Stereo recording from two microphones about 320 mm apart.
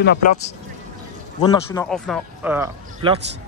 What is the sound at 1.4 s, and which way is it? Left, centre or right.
Speech, centre.